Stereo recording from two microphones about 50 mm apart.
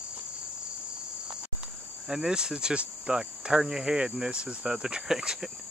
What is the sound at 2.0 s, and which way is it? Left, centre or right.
Speech, centre.